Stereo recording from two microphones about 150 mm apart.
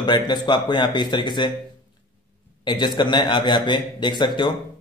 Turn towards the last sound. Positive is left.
turn(degrees=30)  # may be behind; listen again after turning